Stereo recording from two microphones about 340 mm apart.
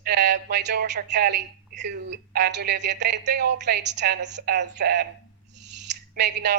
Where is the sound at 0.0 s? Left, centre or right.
Right.